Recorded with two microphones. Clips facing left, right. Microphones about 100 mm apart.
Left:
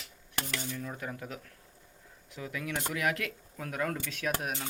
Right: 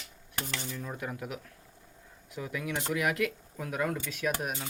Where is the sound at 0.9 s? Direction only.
10° right (ahead or behind).